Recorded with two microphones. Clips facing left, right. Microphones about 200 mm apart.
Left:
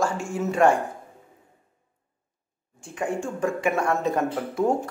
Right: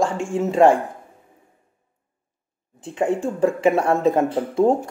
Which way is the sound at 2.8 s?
25° right (ahead or behind).